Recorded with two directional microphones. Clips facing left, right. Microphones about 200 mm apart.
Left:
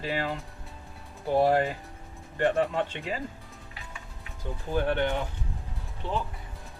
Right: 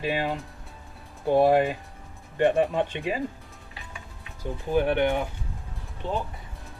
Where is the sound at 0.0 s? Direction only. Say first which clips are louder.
Right 3 dB; 20° right (ahead or behind).